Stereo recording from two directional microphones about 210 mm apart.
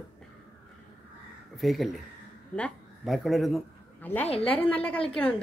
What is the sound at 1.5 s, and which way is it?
A man's voice, centre (ahead or behind).